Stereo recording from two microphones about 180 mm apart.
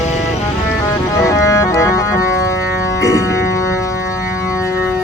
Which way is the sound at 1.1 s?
15° left (ahead or behind).